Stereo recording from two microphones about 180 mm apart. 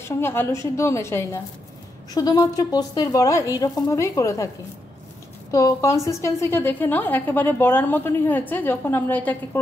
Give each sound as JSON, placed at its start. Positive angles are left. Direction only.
{"t": 0.0, "sound": "a woman's voice", "side_deg": 15}
{"t": 5.5, "sound": "a woman's voice", "side_deg": 20}